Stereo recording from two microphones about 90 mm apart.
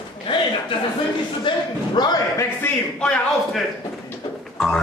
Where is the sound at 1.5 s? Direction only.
65° left (ahead or behind).